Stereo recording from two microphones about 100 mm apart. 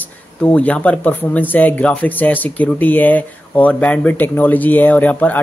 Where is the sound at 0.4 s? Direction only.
15° left (ahead or behind).